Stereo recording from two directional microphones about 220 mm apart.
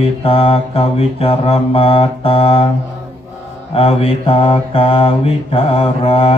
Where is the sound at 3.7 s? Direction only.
25° left (ahead or behind).